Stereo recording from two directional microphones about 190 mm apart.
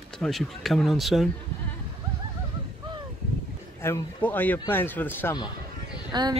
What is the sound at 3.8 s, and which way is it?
Speech, 10° left (ahead or behind).